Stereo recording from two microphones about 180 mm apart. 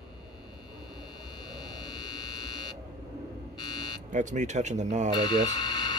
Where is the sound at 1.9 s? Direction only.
20° left (ahead or behind).